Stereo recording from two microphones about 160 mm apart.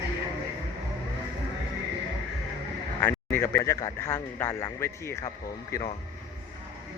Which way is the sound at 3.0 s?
15° left (ahead or behind).